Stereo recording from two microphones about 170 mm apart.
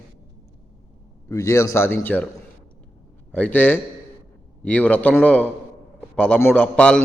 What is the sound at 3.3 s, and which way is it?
A man's voice, 10° left (ahead or behind).